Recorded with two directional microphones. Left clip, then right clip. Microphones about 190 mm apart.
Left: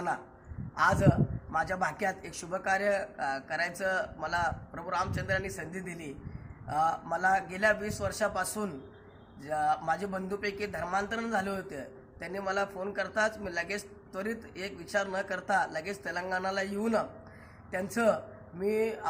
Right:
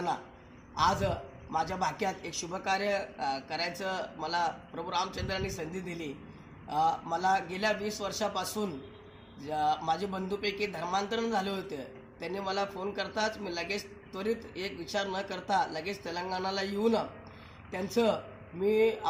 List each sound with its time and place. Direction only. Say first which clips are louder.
1.5 s a man's voice: even; 15° left (ahead or behind)
6.7 s a man's voice: even; 15° left (ahead or behind)